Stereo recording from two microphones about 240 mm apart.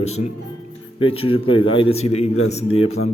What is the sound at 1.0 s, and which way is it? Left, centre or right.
Speech, left.